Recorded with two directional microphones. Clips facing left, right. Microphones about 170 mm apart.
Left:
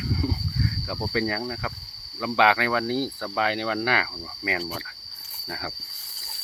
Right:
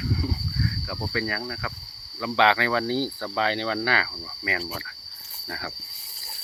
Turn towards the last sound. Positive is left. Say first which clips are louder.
# left 1 dB
turn(degrees=10)  # may be behind; listen again after turning